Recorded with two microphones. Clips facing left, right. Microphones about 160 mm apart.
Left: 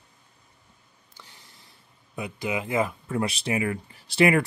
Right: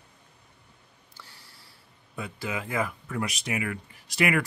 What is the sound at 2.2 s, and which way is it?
Speech, 20° left (ahead or behind).